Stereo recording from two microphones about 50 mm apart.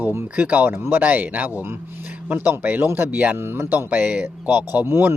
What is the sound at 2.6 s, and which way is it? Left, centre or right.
Speech, right.